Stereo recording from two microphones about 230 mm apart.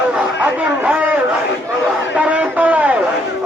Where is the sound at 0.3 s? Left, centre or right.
Centre.